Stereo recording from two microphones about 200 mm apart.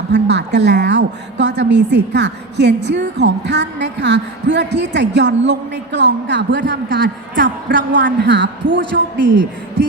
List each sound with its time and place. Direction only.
0.1 s a woman's voice: 60° right (ahead or behind)